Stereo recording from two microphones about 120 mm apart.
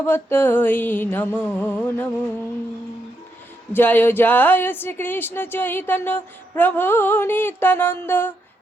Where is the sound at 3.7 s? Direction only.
15° left (ahead or behind).